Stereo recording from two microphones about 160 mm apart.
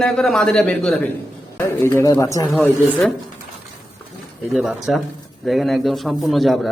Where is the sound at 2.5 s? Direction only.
10° left (ahead or behind).